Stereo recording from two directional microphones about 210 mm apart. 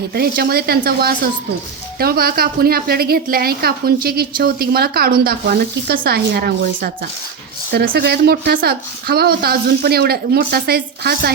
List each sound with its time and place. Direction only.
0.1 s a woman's voice: 45° right (ahead or behind)